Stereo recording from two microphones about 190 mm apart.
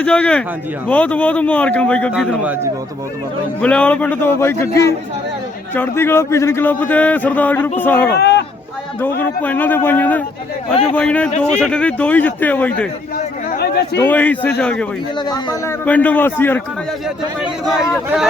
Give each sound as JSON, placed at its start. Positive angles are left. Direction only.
{"t": 0.0, "sound": "a man's voice", "side_deg": 5}
{"t": 3.6, "sound": "a man's voice", "side_deg": 5}
{"t": 8.2, "sound": "a sound", "side_deg": 60}
{"t": 9.0, "sound": "a man's voice", "side_deg": 10}
{"t": 11.3, "sound": "a man's voice", "side_deg": 35}
{"t": 11.5, "sound": "a man's voice", "side_deg": 5}
{"t": 13.6, "sound": "speech", "side_deg": 60}
{"t": 14.0, "sound": "a man's voice", "side_deg": 10}
{"t": 15.2, "sound": "a man's voice", "side_deg": 20}
{"t": 15.8, "sound": "a man's voice", "side_deg": 10}
{"t": 17.4, "sound": "speech", "side_deg": 0}